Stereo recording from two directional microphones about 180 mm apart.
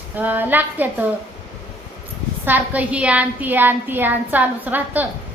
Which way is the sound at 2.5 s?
10° right (ahead or behind).